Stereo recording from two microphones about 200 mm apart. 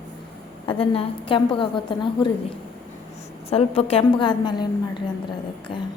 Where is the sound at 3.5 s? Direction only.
30° left (ahead or behind).